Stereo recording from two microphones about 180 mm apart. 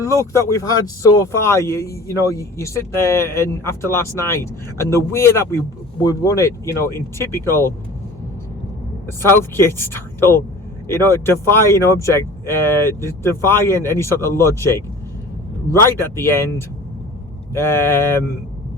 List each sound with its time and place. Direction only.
0.2 s speech: 15° left (ahead or behind)
9.0 s speech: 15° left (ahead or behind)